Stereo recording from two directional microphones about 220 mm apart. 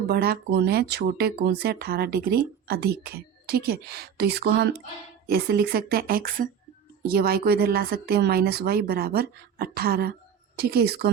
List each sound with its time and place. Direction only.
0.1 s speech: 45° right (ahead or behind)